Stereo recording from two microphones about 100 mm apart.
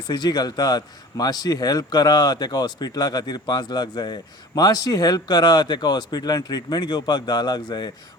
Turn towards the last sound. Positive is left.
turn(degrees=45)  # may be behind; listen again after turning